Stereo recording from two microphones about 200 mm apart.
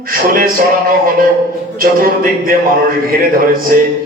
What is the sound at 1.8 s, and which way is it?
Speech, 45° right (ahead or behind).